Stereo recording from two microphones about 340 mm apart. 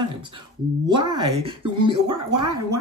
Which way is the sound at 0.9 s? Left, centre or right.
Centre.